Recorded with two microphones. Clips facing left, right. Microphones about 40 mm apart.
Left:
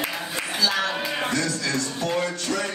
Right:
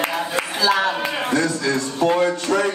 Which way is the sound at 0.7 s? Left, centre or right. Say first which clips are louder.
Right 4 dB; right.